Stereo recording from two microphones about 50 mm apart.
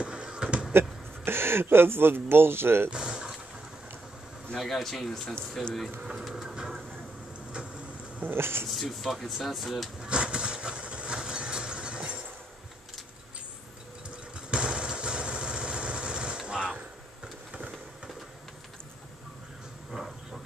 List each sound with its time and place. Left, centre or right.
0.0 s a sound: centre
0.7 s speech: right
2.9 s a sound: centre
4.6 s speech: centre
6.0 s printer: centre
8.4 s speech: right
8.6 s speech: centre
10.0 s vehicle: centre
14.5 s vehicle: centre